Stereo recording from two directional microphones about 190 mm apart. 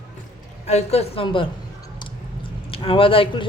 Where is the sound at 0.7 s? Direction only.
35° left (ahead or behind).